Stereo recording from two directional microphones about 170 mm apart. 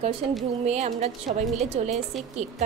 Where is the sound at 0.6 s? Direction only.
40° right (ahead or behind).